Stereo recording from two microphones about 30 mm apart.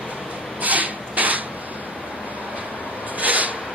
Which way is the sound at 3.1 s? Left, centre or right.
Right.